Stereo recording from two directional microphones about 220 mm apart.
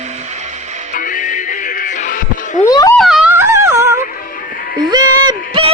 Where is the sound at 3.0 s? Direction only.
Centre (ahead or behind).